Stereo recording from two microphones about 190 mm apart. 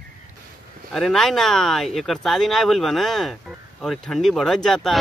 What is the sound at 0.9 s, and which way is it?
Speech, centre (ahead or behind).